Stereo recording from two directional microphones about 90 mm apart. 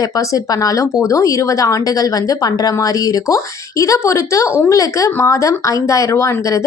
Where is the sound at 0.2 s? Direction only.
40° left (ahead or behind).